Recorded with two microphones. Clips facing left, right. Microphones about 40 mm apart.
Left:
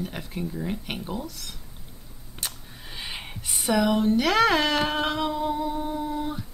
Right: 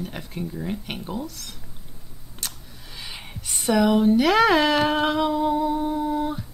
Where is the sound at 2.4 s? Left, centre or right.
Centre.